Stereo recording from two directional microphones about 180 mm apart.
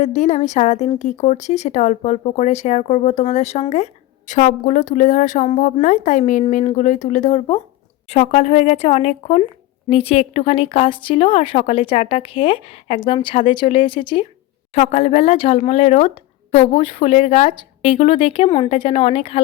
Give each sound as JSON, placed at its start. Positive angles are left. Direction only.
{"t": 0.0, "sound": "a woman's voice", "side_deg": 40}